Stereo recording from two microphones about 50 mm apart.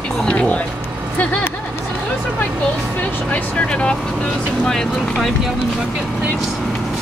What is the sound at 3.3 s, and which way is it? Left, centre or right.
Speech, left.